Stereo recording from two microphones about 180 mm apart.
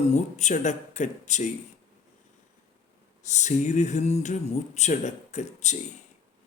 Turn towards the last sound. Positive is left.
turn(degrees=40)  # may be behind; listen again after turning